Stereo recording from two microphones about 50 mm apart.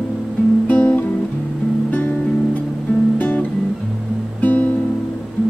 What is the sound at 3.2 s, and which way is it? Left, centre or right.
Music, left.